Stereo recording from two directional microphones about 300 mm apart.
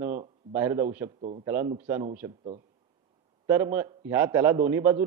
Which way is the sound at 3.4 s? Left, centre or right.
Centre.